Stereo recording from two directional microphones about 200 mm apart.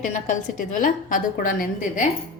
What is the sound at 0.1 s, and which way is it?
A woman's voice, 40° left (ahead or behind).